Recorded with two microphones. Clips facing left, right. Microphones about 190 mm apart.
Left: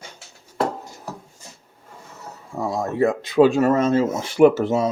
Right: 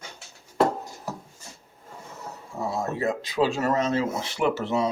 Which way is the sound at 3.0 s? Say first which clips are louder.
Left 10 dB; 55° left (ahead or behind).